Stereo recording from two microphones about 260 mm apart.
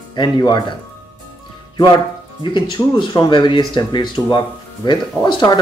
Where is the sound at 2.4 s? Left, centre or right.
Centre.